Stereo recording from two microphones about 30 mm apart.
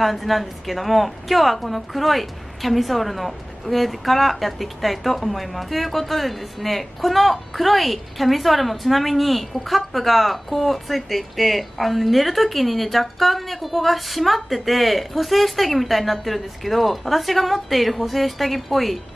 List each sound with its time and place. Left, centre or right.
0.0 s a woman's voice: centre